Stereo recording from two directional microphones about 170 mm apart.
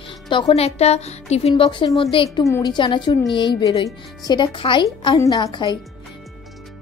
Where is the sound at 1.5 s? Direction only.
30° left (ahead or behind).